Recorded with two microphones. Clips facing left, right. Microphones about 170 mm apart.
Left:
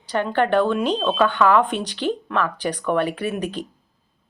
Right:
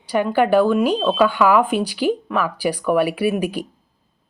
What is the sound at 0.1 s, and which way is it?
Speech, 10° right (ahead or behind).